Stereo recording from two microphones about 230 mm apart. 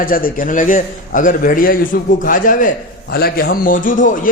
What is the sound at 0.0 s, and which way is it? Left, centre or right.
A man's voice, left.